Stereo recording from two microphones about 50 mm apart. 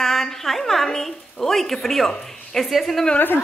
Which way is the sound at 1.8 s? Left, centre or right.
Centre.